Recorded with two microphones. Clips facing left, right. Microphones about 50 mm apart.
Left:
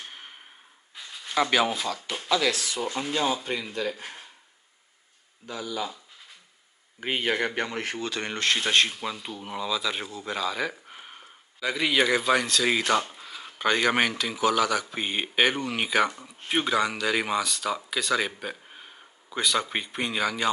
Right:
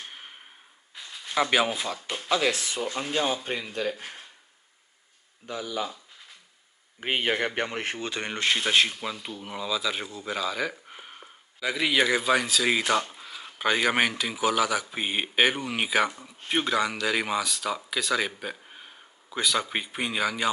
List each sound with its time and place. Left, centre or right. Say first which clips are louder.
0.0 s a sound: even; centre
1.3 s speech: even; centre; by 2.8 s right
3.1 s speech: left 1 dB; centre
5.5 s speech: right 1 dB; right
7.0 s speech: even; right
8.2 s speech: even; centre